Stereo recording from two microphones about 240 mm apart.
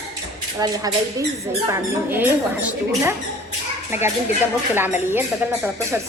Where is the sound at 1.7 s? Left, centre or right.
Centre.